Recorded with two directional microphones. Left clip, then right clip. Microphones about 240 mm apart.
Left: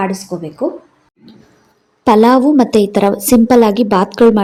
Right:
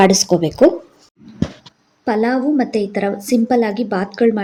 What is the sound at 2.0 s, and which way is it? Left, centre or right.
A woman's voice, left.